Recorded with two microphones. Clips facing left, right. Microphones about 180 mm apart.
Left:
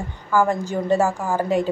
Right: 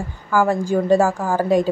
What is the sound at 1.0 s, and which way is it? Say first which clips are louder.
Speech: right 2 dB; 15° left (ahead or behind).